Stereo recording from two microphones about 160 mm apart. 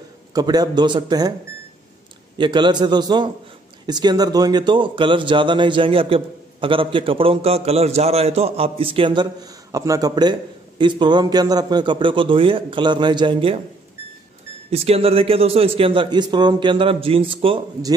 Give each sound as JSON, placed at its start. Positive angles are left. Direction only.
{"t": 0.3, "sound": "a man's voice", "side_deg": -25}
{"t": 2.3, "sound": "a man's voice", "side_deg": -30}
{"t": 14.7, "sound": "a man's voice", "side_deg": -40}